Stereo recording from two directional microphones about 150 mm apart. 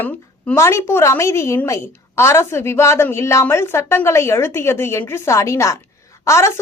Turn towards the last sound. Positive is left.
turn(degrees=20)  # may be behind; listen again after turning